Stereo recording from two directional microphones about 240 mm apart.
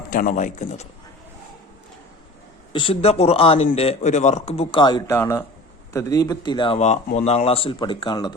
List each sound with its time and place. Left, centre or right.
0.1 s a man's voice: left
2.7 s speech: left